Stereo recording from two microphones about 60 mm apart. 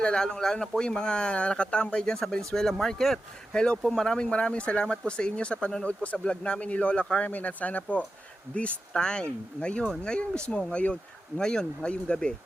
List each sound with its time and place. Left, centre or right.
0.0 s speech: centre
8.9 s speech: centre